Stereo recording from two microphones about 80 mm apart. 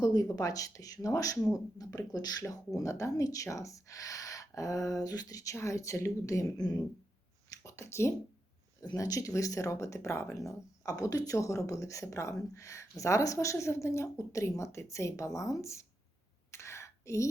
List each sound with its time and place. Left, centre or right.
0.0 s speech: left
2.7 s speech: left
7.6 s speech: left
16.5 s a sound: left